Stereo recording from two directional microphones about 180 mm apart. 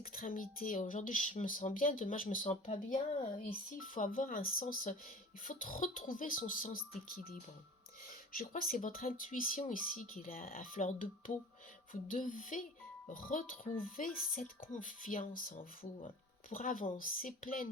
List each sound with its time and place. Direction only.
0.0 s speech: 50° left (ahead or behind)
8.3 s speech: 50° left (ahead or behind)